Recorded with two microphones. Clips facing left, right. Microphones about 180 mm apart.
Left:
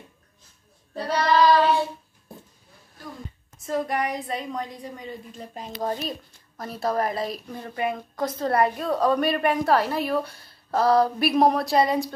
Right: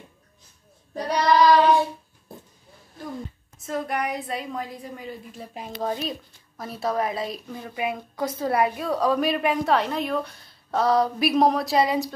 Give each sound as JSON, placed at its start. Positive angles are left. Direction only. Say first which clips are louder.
{"t": 0.9, "sound": "child singing", "louder": "right 1 dB", "side_deg": -15}
{"t": 3.5, "sound": "a woman's voice", "louder": "left 2 dB", "side_deg": 0}